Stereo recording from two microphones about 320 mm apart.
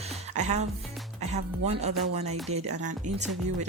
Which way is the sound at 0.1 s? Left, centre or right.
Right.